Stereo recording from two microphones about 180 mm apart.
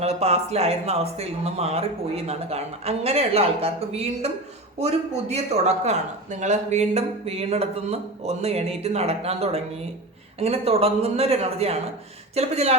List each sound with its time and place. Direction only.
0.0 s speech: 35° right (ahead or behind)